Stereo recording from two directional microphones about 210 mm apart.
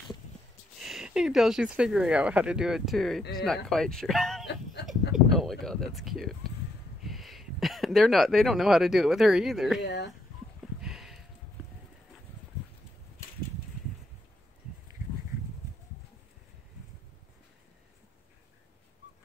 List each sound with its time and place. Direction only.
0.7 s speech: centre (ahead or behind)
9.8 s speech: 55° left (ahead or behind)
10.6 s a sound: 5° right (ahead or behind)